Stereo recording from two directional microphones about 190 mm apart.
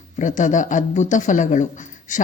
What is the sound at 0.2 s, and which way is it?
Speech, 40° left (ahead or behind).